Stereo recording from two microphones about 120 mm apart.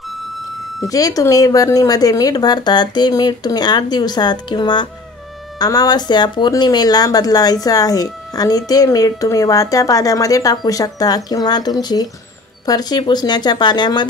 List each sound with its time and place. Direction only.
0.8 s speech: 30° left (ahead or behind)